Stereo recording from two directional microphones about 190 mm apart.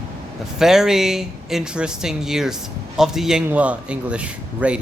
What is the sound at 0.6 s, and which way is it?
Speech, centre (ahead or behind).